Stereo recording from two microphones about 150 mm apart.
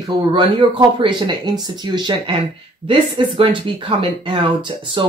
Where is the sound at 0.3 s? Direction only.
35° right (ahead or behind).